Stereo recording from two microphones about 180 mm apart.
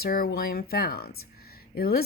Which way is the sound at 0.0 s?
55° left (ahead or behind).